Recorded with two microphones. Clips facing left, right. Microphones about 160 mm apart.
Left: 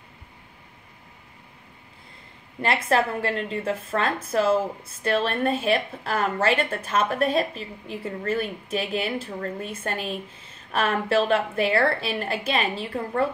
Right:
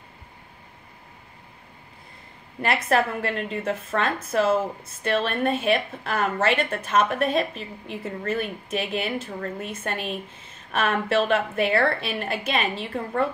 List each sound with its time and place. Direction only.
2.6 s speech: 30° left (ahead or behind)